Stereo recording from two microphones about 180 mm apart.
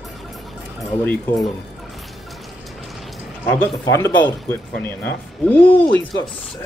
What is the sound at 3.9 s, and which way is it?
Speech, 15° left (ahead or behind).